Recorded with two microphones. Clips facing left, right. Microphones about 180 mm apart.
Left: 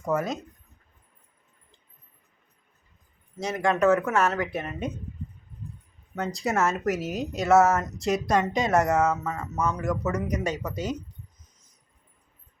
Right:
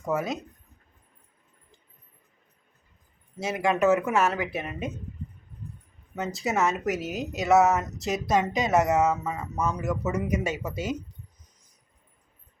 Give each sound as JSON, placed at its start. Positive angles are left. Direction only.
{"t": 0.0, "sound": "speech", "side_deg": 0}
{"t": 3.4, "sound": "speech", "side_deg": -5}
{"t": 6.1, "sound": "speech", "side_deg": 0}